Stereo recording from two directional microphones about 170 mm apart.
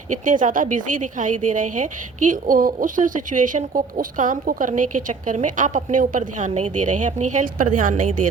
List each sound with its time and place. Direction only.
0.1 s a woman's voice: 50° right (ahead or behind)